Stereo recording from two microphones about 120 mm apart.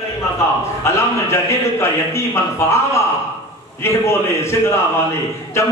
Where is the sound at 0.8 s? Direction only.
25° left (ahead or behind).